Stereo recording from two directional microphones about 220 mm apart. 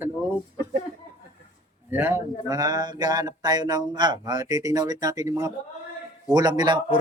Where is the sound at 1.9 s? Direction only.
10° right (ahead or behind).